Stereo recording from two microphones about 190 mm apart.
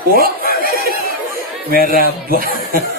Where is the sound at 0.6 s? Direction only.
50° right (ahead or behind).